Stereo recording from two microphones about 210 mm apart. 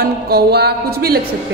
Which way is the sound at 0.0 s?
50° right (ahead or behind).